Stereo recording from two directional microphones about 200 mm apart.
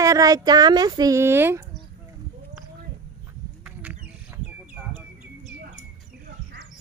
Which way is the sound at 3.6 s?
5° right (ahead or behind).